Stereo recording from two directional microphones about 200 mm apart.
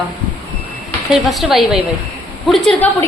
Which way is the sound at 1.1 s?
Centre (ahead or behind).